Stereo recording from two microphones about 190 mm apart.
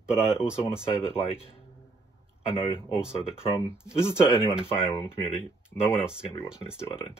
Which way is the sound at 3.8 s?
15° left (ahead or behind).